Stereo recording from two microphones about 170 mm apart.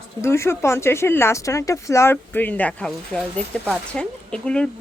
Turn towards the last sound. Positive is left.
turn(degrees=5)  # may be behind; listen again after turning